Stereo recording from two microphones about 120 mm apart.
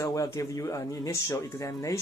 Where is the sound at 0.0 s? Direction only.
25° left (ahead or behind).